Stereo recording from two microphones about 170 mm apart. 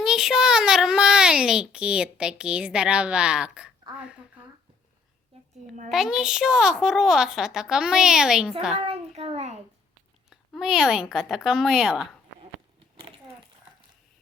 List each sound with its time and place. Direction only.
0.0 s a child's voice: centre (ahead or behind)
5.9 s a child's voice: centre (ahead or behind)
8.7 s a child's voice: 35° right (ahead or behind)
10.2 s a child's voice: 5° right (ahead or behind)